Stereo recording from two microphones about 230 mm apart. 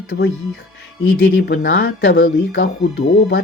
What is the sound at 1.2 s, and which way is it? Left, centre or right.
Speech, left.